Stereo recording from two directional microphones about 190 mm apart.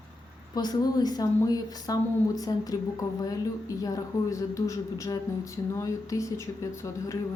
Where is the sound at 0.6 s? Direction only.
20° left (ahead or behind).